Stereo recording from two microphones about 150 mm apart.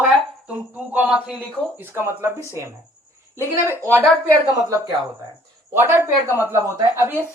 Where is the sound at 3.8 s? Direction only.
15° right (ahead or behind).